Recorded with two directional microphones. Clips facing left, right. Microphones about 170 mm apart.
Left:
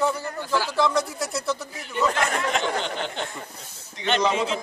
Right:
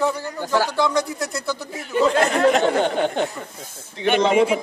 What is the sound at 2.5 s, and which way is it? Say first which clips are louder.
Speech: right 9 dB; 50° right (ahead or behind).